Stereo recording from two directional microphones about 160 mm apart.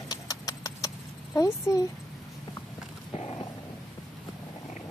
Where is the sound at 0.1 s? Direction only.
20° left (ahead or behind).